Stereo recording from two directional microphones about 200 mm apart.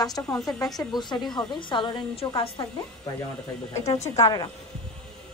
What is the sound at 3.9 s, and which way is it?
Speech, 30° left (ahead or behind).